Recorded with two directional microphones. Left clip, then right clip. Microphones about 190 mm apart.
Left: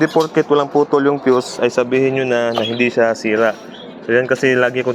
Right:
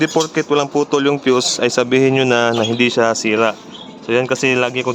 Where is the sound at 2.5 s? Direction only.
15° right (ahead or behind).